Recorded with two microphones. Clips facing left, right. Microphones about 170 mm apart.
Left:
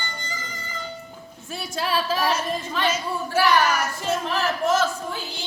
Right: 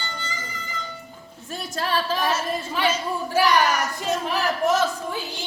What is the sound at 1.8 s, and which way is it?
Singing, 5° left (ahead or behind).